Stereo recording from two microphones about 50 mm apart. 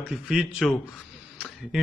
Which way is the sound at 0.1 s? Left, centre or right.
Centre.